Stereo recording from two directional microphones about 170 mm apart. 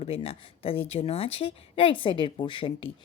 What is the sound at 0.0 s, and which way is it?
A woman's voice, 35° left (ahead or behind).